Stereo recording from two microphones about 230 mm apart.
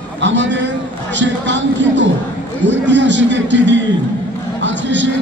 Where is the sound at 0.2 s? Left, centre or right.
Right.